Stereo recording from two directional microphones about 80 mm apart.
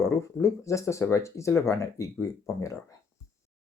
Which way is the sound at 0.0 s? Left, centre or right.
Left.